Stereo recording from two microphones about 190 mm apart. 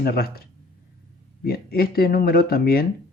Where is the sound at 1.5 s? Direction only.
55° left (ahead or behind).